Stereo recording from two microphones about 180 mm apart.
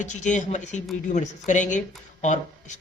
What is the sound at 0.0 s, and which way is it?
A man's voice, 45° left (ahead or behind).